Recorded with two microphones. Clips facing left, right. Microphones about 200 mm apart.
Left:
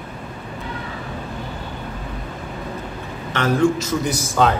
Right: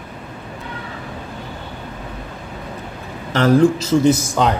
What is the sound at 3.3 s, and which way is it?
Speech, 35° right (ahead or behind).